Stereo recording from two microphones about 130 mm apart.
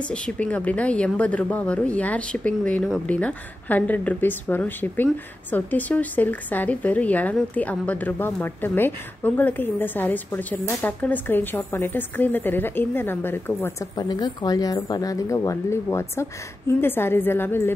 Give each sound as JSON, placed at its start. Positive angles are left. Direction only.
{"t": 0.1, "sound": "a woman's voice", "side_deg": 10}
{"t": 13.9, "sound": "speech", "side_deg": 30}